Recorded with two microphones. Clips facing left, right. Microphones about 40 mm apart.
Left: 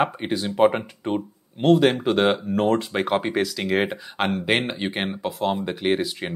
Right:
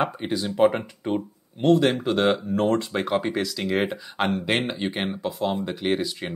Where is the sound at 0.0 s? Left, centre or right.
Centre.